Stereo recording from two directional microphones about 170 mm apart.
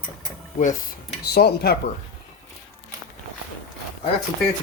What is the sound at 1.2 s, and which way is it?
Speech, 70° left (ahead or behind).